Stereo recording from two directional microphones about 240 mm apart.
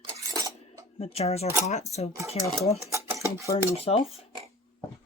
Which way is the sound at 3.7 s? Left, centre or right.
Left.